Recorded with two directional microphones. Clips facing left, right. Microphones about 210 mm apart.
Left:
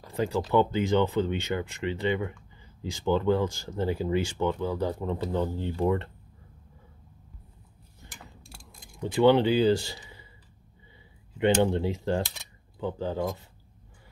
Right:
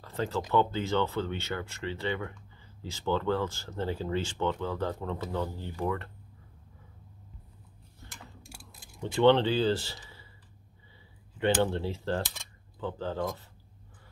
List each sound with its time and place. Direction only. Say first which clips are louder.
0.0 s speech: left 4 dB; 15° left (ahead or behind)
8.1 s mechanisms: even; 10° right (ahead or behind)
9.0 s speech: left 2 dB; 10° left (ahead or behind)
11.3 s speech: left 4 dB; 15° left (ahead or behind)